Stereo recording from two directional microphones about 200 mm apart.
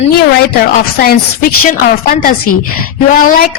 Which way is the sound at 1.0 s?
45° left (ahead or behind).